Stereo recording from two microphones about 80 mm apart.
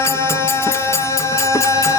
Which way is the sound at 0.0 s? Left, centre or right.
Left.